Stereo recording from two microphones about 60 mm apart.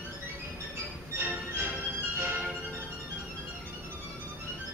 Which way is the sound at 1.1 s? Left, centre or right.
Right.